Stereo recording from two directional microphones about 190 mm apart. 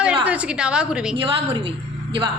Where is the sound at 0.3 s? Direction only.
5° right (ahead or behind).